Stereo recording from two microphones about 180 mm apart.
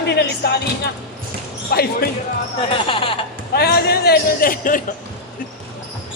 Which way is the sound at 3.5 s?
60° left (ahead or behind).